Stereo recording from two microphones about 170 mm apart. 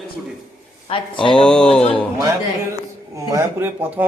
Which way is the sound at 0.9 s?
35° left (ahead or behind).